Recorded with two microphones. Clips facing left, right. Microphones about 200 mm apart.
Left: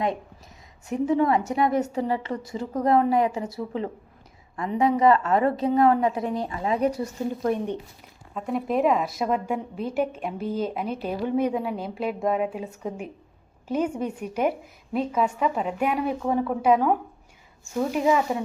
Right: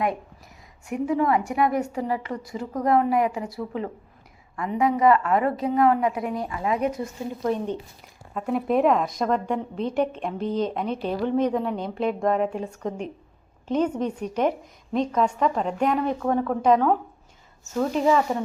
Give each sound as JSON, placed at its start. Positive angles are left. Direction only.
{"t": 0.9, "sound": "a woman's voice", "side_deg": 25}
{"t": 7.5, "sound": "a woman's voice", "side_deg": 15}
{"t": 8.3, "sound": "a woman's voice", "side_deg": 0}